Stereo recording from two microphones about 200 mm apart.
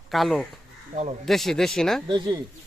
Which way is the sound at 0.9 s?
35° right (ahead or behind).